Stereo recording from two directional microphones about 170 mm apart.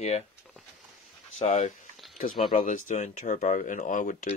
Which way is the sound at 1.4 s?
45° left (ahead or behind).